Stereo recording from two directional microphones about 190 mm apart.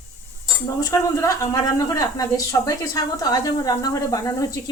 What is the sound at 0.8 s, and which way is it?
A woman's voice, 15° left (ahead or behind).